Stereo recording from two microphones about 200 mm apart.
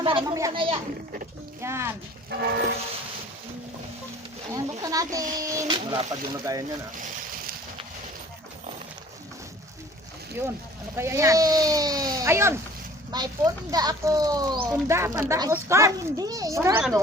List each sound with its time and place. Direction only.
0.0 s speech: 25° right (ahead or behind)
1.6 s a child's voice: 15° right (ahead or behind)
2.3 s train horn: 55° right (ahead or behind)
4.5 s a child's voice: 15° right (ahead or behind)
10.4 s a child's voice: 10° right (ahead or behind)